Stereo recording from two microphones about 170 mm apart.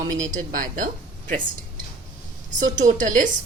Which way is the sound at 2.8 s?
50° right (ahead or behind).